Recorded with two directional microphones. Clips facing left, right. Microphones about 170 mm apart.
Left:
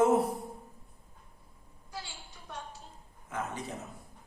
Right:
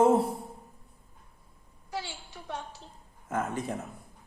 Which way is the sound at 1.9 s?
75° right (ahead or behind).